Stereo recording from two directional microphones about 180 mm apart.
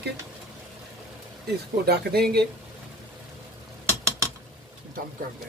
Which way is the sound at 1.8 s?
60° right (ahead or behind).